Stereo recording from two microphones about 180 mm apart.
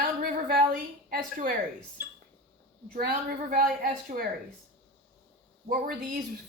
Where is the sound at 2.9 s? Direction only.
55° right (ahead or behind).